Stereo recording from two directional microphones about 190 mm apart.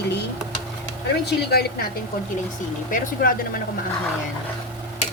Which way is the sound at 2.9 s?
45° left (ahead or behind).